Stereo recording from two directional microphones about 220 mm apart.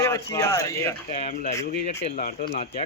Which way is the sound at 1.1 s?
35° left (ahead or behind).